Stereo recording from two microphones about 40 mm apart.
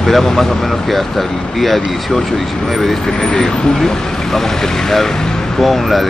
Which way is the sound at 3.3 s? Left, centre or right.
Left.